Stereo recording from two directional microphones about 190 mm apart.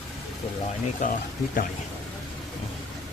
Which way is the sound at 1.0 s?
40° left (ahead or behind).